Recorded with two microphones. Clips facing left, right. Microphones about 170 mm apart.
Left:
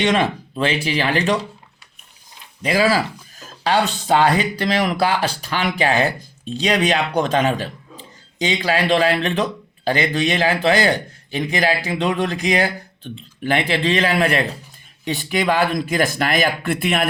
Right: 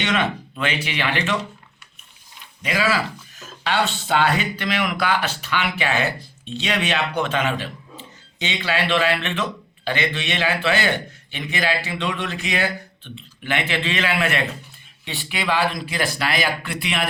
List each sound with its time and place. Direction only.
0.0 s speech: 35° left (ahead or behind)
2.6 s speech: 35° left (ahead or behind); by 17.1 s 50° left (ahead or behind)